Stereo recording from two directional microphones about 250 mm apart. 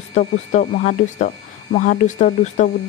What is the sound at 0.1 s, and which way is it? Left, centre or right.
Speech, left.